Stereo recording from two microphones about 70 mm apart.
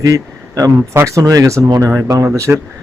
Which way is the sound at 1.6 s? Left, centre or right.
Right.